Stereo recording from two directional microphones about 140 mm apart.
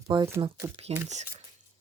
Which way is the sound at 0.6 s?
20° right (ahead or behind).